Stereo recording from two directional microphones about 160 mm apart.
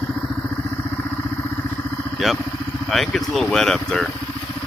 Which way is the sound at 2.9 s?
Centre (ahead or behind).